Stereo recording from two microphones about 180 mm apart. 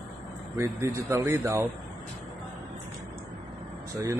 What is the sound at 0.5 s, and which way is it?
A man's voice, 15° right (ahead or behind).